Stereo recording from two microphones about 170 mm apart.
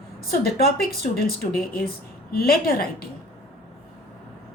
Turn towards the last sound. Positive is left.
turn(degrees=60)  # may be behind; listen again after turning